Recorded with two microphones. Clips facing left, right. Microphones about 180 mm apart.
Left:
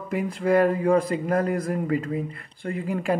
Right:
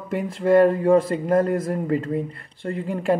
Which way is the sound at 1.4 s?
45° right (ahead or behind).